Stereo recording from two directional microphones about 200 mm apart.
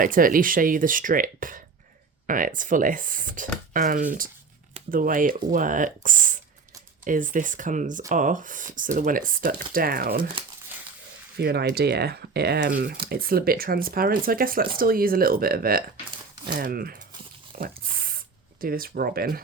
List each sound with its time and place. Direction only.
0.0 s speech: 45° right (ahead or behind)
11.3 s speech: 55° right (ahead or behind)
17.6 s a sound: 45° right (ahead or behind)
18.6 s speech: 45° right (ahead or behind)